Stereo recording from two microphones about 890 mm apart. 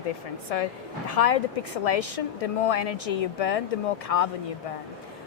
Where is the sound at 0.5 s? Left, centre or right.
Left.